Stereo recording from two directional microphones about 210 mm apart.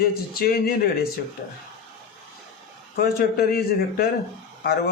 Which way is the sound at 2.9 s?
45° left (ahead or behind).